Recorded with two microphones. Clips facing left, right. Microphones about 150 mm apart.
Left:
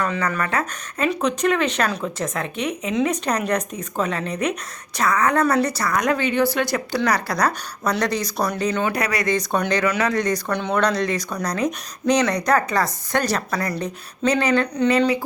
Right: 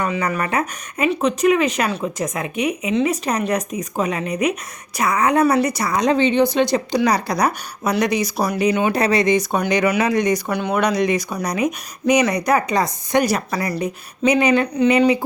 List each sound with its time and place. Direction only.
0.2 s speech: 20° right (ahead or behind)
8.9 s speech: 25° right (ahead or behind)
9.3 s speech: 10° right (ahead or behind)